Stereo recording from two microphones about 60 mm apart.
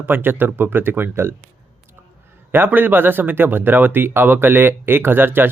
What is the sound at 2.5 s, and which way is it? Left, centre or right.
Speech, right.